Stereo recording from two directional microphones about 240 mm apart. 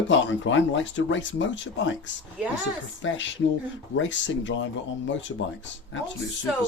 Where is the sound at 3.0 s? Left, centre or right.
Left.